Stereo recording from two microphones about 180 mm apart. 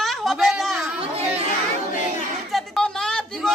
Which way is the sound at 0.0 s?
Centre (ahead or behind).